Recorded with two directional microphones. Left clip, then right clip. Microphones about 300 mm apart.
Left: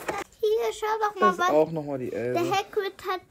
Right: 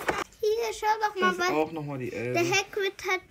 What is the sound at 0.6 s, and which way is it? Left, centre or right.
A child's voice, left.